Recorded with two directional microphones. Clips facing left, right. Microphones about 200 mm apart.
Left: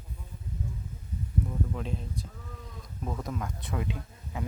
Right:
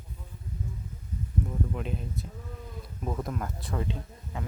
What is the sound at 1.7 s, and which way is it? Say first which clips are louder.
Speech: right 1 dB; 5° right (ahead or behind).